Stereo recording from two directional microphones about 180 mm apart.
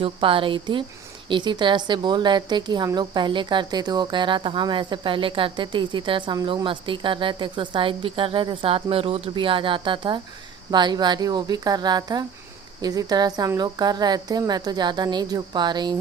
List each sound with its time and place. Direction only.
0.0 s a woman's voice: 30° right (ahead or behind)